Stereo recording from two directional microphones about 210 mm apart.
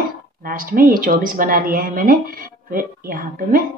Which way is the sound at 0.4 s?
40° right (ahead or behind).